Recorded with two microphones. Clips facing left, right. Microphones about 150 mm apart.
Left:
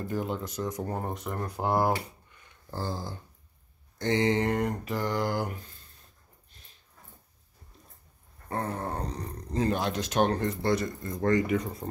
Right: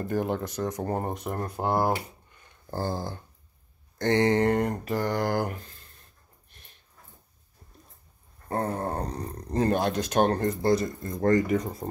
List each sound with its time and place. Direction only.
0.1 s speech: 60° right (ahead or behind)
0.9 s speech: 10° right (ahead or behind)
1.3 s speech: 35° right (ahead or behind)
2.7 s speech: 55° right (ahead or behind)
4.4 s speech: 35° right (ahead or behind)
4.8 s speech: 45° right (ahead or behind)
8.5 s speech: 35° right (ahead or behind)
9.1 s speech: 55° right (ahead or behind); by 11.9 s 35° right (ahead or behind)